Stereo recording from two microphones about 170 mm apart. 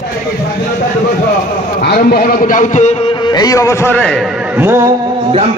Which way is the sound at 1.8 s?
65° left (ahead or behind).